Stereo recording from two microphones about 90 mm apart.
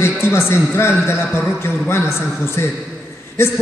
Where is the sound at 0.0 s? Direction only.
25° left (ahead or behind).